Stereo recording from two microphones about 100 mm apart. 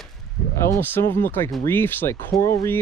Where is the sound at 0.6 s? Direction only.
25° left (ahead or behind).